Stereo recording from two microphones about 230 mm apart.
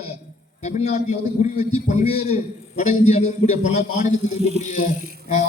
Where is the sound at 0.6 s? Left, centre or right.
Left.